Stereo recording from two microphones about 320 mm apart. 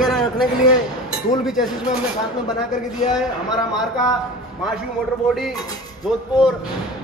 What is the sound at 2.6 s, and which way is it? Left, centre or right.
Speech, left.